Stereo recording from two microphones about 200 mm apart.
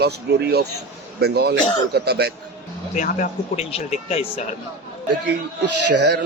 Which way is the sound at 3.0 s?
40° left (ahead or behind).